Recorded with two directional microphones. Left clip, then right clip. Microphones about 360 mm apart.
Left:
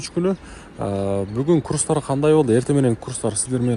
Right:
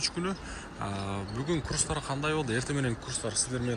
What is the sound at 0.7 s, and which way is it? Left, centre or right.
A man's voice, centre.